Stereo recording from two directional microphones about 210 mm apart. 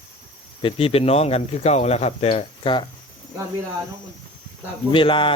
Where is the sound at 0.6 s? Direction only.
25° left (ahead or behind).